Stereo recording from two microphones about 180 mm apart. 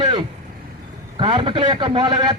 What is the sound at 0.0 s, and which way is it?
Vehicle, 30° right (ahead or behind).